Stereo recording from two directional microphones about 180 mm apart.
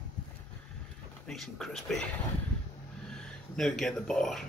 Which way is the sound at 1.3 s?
Centre (ahead or behind).